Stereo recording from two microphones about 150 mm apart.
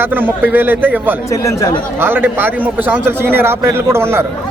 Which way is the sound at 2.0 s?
15° right (ahead or behind).